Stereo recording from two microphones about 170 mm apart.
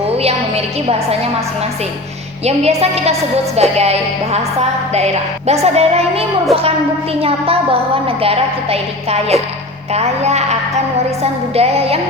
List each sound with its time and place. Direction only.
0.2 s a woman's voice: 35° right (ahead or behind)
2.4 s a woman's voice: 40° right (ahead or behind)